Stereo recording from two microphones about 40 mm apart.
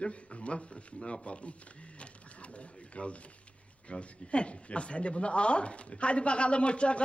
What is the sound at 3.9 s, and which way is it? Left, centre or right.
Speech, left.